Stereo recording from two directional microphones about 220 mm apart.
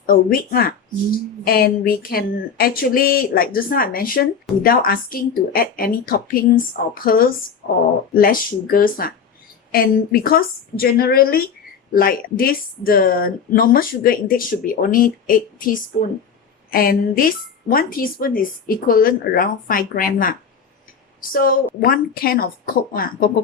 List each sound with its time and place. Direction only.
0.0 s a woman's voice: 40° left (ahead or behind)